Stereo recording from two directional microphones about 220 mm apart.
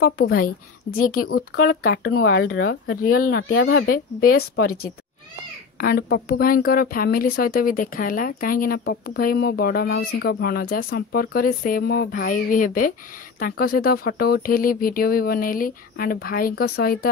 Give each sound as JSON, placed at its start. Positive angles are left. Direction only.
{"t": 0.0, "sound": "speech", "side_deg": 45}
{"t": 3.9, "sound": "speech", "side_deg": 40}